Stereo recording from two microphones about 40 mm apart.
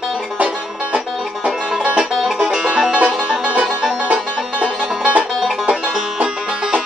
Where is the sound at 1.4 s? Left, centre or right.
Right.